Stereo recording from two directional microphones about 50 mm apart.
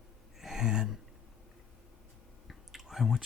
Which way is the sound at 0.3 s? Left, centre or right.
Centre.